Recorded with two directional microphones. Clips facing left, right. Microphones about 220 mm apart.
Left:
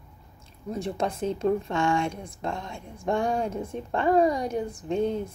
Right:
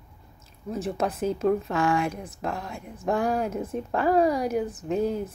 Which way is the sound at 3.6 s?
5° right (ahead or behind).